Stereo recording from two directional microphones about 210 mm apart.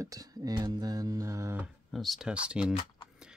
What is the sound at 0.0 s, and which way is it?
Speech, 15° right (ahead or behind).